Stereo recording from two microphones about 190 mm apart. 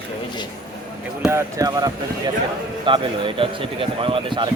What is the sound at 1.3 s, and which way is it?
A man's voice, 20° right (ahead or behind).